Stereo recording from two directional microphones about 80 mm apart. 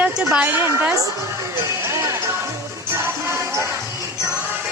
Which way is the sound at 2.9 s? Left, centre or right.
Right.